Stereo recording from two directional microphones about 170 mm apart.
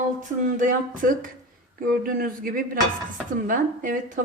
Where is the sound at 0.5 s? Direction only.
50° right (ahead or behind).